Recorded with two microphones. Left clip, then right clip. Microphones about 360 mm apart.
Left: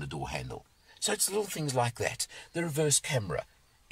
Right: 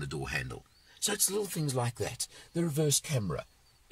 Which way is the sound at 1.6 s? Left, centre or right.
Left.